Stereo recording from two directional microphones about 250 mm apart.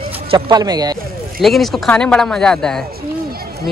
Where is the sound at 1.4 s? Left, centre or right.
Centre.